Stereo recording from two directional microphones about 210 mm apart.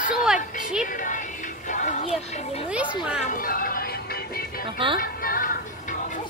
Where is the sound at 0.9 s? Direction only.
40° left (ahead or behind).